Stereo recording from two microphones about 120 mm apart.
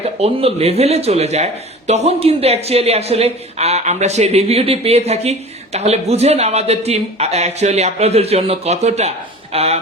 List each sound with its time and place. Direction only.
0.0 s speech: 55° right (ahead or behind)